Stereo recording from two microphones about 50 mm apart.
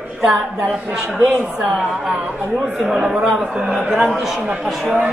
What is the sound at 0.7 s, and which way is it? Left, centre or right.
Speech, centre.